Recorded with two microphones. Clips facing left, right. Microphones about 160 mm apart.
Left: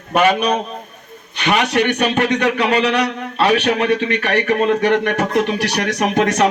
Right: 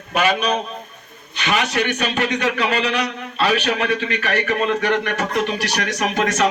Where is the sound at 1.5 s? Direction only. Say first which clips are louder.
Left 4 dB; 65° left (ahead or behind).